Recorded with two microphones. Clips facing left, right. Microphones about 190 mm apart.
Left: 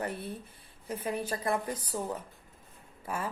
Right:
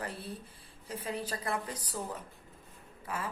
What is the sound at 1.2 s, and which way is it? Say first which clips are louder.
Speech: left 4 dB; 25° left (ahead or behind).